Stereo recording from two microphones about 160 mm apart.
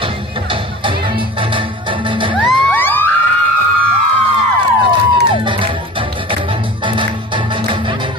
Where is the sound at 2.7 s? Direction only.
10° left (ahead or behind).